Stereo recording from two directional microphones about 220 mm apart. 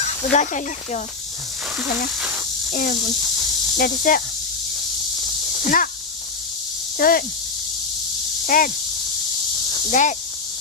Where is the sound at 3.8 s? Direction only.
40° left (ahead or behind).